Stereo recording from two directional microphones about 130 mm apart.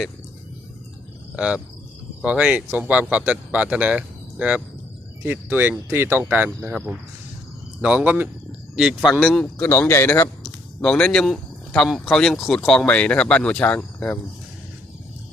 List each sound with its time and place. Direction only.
1.4 s speech: 5° right (ahead or behind)
9.6 s a man's voice: 20° left (ahead or behind)
10.8 s speech: 10° left (ahead or behind)